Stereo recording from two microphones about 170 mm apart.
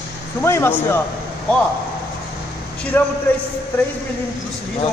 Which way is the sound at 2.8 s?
10° left (ahead or behind).